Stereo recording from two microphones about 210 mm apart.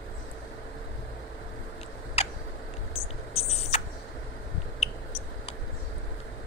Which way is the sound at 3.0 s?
30° left (ahead or behind).